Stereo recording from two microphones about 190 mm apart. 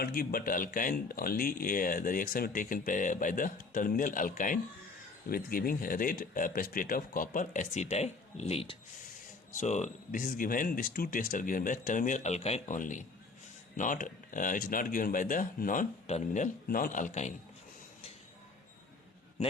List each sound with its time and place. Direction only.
0.0 s speech: 50° left (ahead or behind)